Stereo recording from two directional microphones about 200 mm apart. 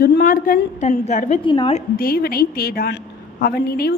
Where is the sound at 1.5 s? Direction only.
25° left (ahead or behind).